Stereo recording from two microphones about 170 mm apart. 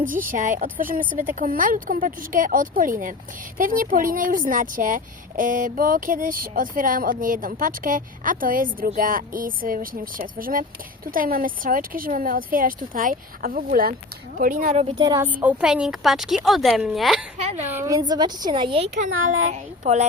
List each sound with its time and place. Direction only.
0.0 s speech: 50° right (ahead or behind)
14.7 s a woman's voice: 35° right (ahead or behind)
14.9 s a woman's voice: 25° right (ahead or behind)
15.2 s a woman's voice: 10° right (ahead or behind)
17.7 s a woman's voice: 15° right (ahead or behind)
18.9 s speech: 45° right (ahead or behind)